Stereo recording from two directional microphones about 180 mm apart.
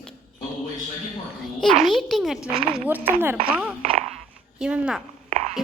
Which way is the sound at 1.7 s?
Centre (ahead or behind).